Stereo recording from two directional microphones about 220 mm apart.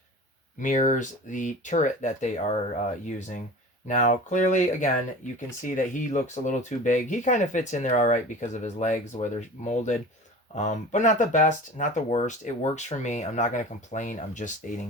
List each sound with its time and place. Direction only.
0.6 s speech: 35° left (ahead or behind)